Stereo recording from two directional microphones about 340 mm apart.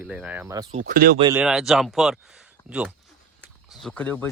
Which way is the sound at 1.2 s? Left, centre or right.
Centre.